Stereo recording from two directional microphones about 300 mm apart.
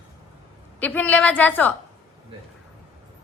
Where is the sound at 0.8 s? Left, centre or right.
Centre.